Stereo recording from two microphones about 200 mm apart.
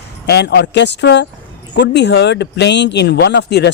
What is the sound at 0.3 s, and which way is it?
Speech, 55° left (ahead or behind).